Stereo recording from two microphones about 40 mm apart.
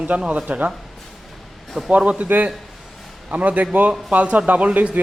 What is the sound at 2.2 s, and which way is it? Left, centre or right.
A man's voice, right.